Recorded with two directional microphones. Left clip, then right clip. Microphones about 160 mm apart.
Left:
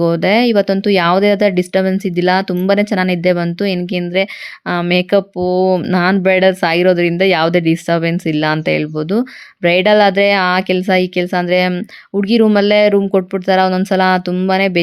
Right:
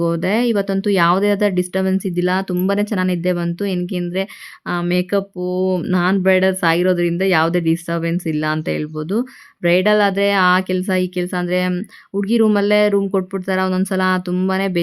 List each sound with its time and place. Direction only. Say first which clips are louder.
0.0 s speech: left 6 dB; 15° left (ahead or behind)